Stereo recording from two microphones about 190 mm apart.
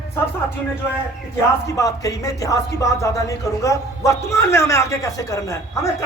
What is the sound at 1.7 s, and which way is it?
Speech, 15° left (ahead or behind).